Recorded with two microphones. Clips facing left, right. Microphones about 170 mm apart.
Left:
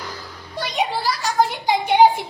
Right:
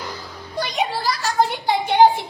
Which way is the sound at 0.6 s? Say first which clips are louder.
Even; 5° left (ahead or behind).